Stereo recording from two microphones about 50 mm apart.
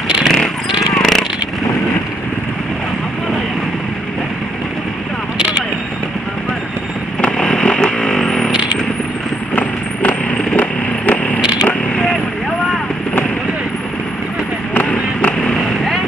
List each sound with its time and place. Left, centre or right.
0.2 s vehicle: centre
7.2 s vehicle: centre
9.6 s vehicle: left
14.7 s vehicle: left